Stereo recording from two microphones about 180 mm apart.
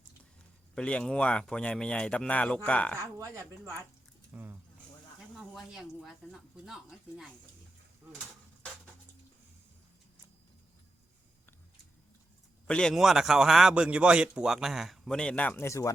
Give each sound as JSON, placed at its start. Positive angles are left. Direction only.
{"t": 0.8, "sound": "a man's voice", "side_deg": 5}
{"t": 3.0, "sound": "a man's voice", "side_deg": -15}
{"t": 12.6, "sound": "a man's voice", "side_deg": 5}